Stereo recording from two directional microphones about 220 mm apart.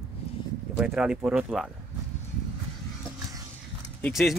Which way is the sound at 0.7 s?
5° right (ahead or behind).